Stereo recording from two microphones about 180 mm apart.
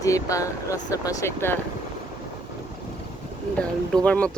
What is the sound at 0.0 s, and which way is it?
Speech, 20° left (ahead or behind).